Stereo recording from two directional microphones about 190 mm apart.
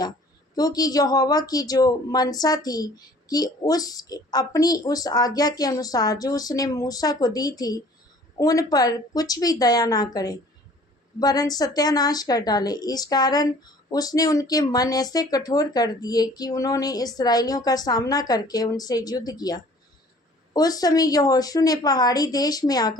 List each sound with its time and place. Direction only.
0.5 s speech: 20° left (ahead or behind)